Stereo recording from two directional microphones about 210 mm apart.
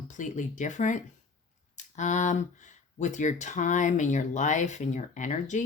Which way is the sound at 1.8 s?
35° left (ahead or behind).